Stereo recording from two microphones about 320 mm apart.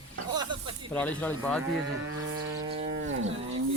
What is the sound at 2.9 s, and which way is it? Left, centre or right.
Livestock, right.